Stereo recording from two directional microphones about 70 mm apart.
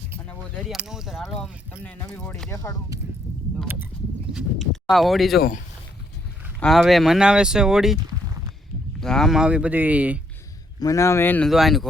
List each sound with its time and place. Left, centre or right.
0.8 s speech: centre
1.8 s speech: left
2.5 s a man's voice: left
4.3 s speech: centre
6.7 s speech: centre
7.2 s speech: centre
9.0 s speech: centre
9.3 s speech: centre
10.8 s a man's voice: left
11.4 s speech: centre